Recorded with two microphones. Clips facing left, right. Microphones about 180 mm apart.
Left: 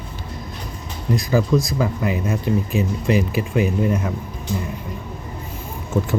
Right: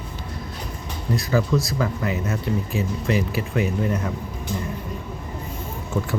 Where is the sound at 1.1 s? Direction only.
15° left (ahead or behind).